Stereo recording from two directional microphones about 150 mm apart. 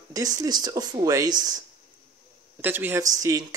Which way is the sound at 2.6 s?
15° right (ahead or behind).